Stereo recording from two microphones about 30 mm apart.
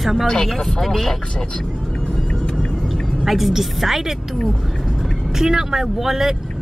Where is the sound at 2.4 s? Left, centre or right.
Left.